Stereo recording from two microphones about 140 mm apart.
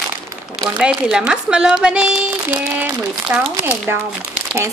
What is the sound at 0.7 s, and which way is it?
A woman's voice, 5° right (ahead or behind).